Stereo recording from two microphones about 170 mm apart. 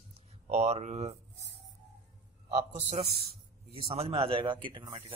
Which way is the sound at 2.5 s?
40° right (ahead or behind).